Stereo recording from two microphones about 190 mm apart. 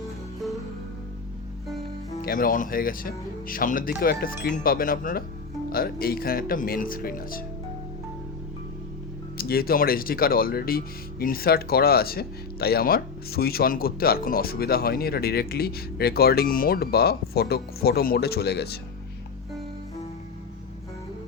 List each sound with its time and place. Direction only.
2.2 s speech: 50° left (ahead or behind)
9.4 s speech: 50° left (ahead or behind)